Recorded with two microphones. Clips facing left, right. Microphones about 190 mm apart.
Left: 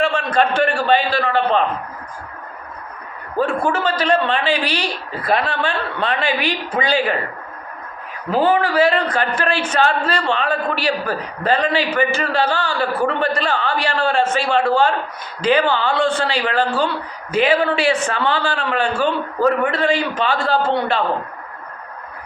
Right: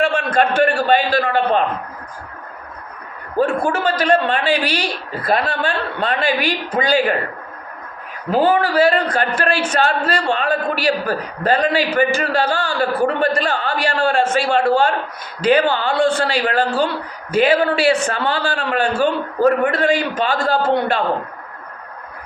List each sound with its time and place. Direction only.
0.0 s a sound: 50° right (ahead or behind)
0.8 s a man's voice: 45° right (ahead or behind)
3.3 s a man's voice: 45° right (ahead or behind)
8.4 s a man's voice: 40° right (ahead or behind)